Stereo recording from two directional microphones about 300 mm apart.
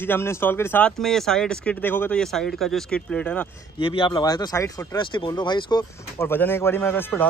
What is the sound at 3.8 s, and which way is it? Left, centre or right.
Speech, centre.